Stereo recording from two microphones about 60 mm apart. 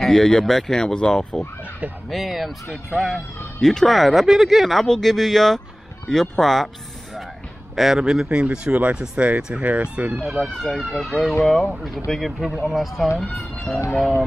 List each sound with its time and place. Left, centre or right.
0.0 s speech: centre
2.0 s speech: centre
7.7 s speech: centre; by 10.1 s right
10.4 s speech: centre
11.7 s speech: centre
13.3 s speech: left